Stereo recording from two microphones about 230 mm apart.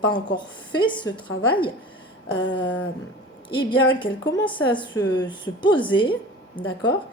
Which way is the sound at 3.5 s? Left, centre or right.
Left.